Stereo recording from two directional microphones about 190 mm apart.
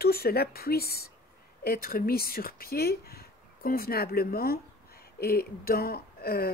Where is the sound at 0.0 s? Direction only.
55° left (ahead or behind).